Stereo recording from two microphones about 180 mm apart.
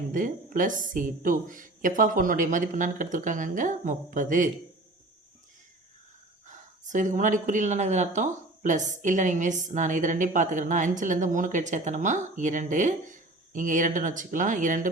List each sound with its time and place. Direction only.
0.1 s speech: 45° right (ahead or behind)
6.5 s speech: 45° right (ahead or behind)